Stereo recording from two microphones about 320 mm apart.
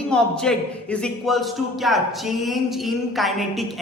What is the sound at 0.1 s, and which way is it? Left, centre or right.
Speech, centre.